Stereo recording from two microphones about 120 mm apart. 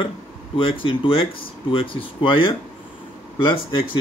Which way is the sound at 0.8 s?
45° left (ahead or behind).